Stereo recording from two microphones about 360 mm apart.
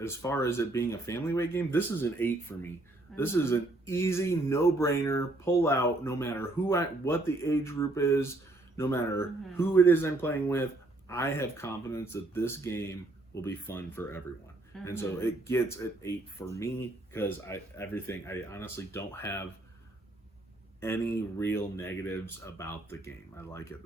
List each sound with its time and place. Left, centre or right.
0.0 s speech: centre
20.8 s speech: centre